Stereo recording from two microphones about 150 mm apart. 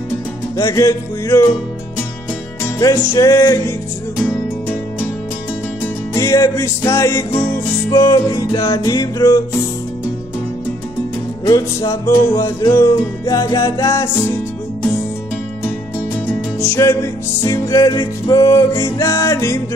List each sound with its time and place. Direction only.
0.6 s music: 25° left (ahead or behind)
2.8 s music: 20° left (ahead or behind)
6.1 s music: 20° left (ahead or behind)
11.4 s music: 20° left (ahead or behind)
16.3 s music: 15° left (ahead or behind)